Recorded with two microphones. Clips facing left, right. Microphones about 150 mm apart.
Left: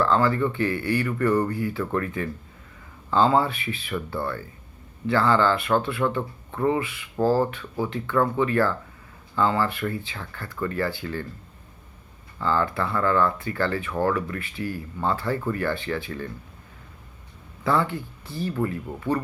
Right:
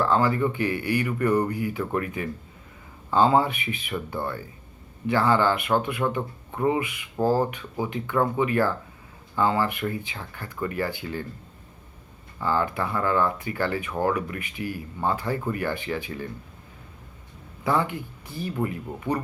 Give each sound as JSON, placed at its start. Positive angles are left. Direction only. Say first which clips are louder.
{"t": 0.0, "sound": "speech", "louder": "left 1 dB", "side_deg": -15}
{"t": 12.4, "sound": "speech", "louder": "left 1 dB", "side_deg": -15}
{"t": 17.6, "sound": "speech", "louder": "left 1 dB", "side_deg": -15}